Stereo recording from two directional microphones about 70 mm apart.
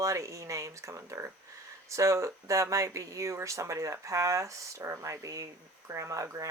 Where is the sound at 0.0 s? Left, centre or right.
Right.